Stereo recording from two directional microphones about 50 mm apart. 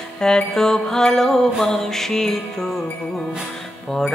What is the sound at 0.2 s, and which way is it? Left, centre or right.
Music, centre.